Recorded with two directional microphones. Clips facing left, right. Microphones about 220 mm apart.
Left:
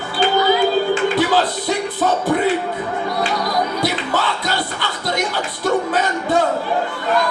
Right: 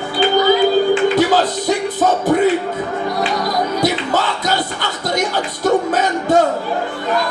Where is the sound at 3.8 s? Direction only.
45° right (ahead or behind).